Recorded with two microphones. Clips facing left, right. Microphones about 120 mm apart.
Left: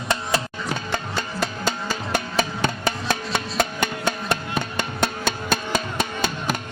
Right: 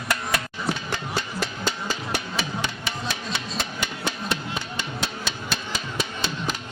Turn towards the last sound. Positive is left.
turn(degrees=50)  # may be behind; listen again after turning